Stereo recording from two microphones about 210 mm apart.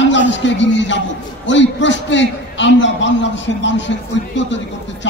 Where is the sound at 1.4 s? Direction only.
60° left (ahead or behind).